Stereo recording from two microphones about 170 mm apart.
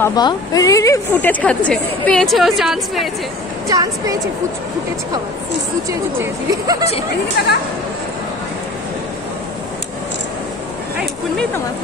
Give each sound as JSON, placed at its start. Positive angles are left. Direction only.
{"t": 0.0, "sound": "a woman's voice", "side_deg": 25}
{"t": 3.6, "sound": "speech", "side_deg": -20}
{"t": 5.9, "sound": "speech", "side_deg": -15}
{"t": 7.4, "sound": "speech", "side_deg": 70}